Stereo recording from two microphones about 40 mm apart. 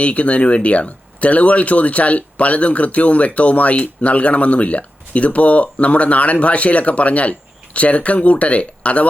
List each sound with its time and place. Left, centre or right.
0.0 s speech: left